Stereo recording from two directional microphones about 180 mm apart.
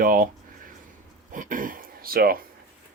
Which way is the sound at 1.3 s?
45° right (ahead or behind).